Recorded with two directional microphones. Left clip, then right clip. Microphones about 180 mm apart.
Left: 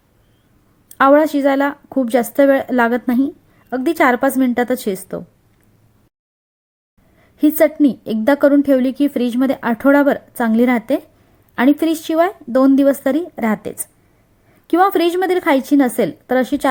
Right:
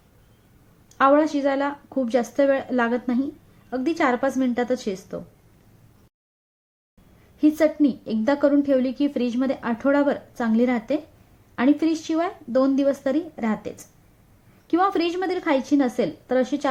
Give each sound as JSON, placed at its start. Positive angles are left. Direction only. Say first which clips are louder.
{"t": 0.9, "sound": "a woman's voice", "louder": "left 6 dB", "side_deg": 35}
{"t": 7.3, "sound": "a woman's voice", "louder": "left 6 dB", "side_deg": 40}